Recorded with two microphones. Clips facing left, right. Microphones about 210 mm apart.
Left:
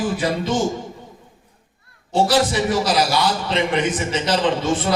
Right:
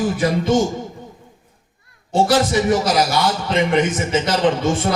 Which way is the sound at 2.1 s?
45° right (ahead or behind).